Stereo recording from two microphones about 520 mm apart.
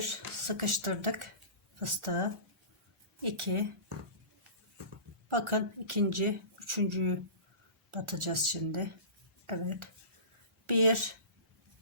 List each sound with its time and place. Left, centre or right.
0.0 s speech: right
3.2 s speech: right
5.3 s speech: right